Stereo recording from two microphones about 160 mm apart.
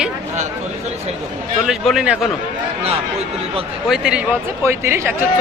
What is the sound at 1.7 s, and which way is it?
Speech, centre (ahead or behind).